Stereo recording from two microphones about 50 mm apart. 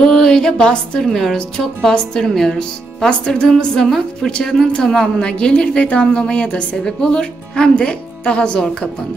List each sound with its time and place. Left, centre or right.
0.0 s music: centre
1.0 s a woman's voice: centre